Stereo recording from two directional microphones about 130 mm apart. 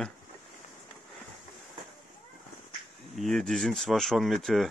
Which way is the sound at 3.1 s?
5° left (ahead or behind).